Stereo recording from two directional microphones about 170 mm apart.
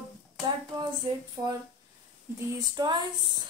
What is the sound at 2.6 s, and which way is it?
Speech, 25° right (ahead or behind).